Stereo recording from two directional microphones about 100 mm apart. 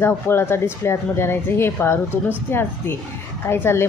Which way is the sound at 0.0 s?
25° left (ahead or behind).